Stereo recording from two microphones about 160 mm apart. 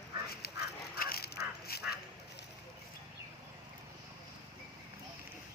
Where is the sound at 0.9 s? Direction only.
70° left (ahead or behind).